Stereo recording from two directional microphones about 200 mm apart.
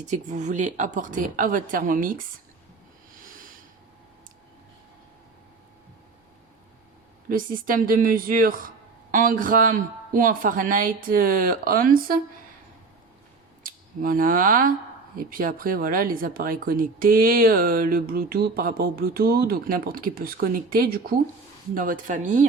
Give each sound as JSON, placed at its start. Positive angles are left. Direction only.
{"t": 0.0, "sound": "a woman's voice", "side_deg": -35}
{"t": 3.2, "sound": "snort", "side_deg": -45}
{"t": 7.3, "sound": "speech", "side_deg": -45}
{"t": 13.6, "sound": "a woman's voice", "side_deg": -45}